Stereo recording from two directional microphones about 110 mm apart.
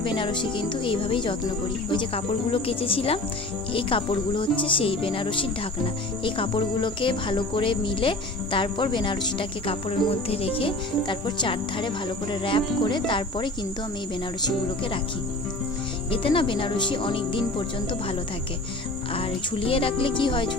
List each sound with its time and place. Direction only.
0.0 s speech: 50° left (ahead or behind)
16.1 s speech: 55° left (ahead or behind)
19.1 s speech: 55° left (ahead or behind)